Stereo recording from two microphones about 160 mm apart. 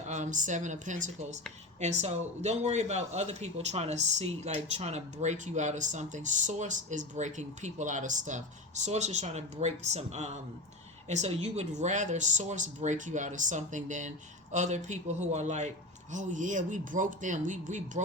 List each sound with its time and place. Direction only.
0.1 s speech: 50° right (ahead or behind)